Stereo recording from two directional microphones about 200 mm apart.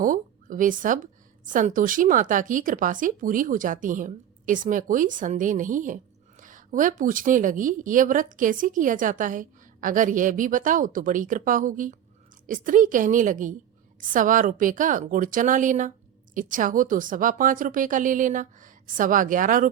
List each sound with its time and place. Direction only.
0.0 s a woman's voice: 40° right (ahead or behind)